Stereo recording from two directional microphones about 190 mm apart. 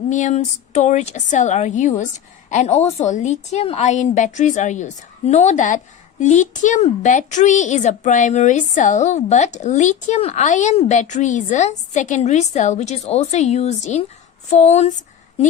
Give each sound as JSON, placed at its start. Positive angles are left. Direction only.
{"t": 0.1, "sound": "a woman's voice", "side_deg": 40}